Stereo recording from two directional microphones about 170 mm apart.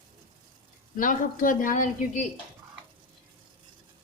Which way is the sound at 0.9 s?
50° left (ahead or behind).